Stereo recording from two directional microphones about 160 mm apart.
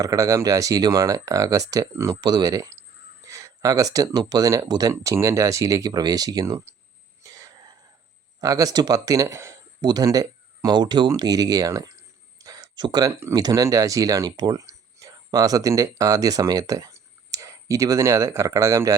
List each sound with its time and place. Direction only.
0.0 s speech: 20° right (ahead or behind)
7.2 s throat clearing: 20° right (ahead or behind)
8.4 s speech: 20° right (ahead or behind)